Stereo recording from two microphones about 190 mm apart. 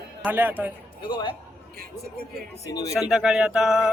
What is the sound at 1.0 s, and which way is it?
Speech, 25° left (ahead or behind).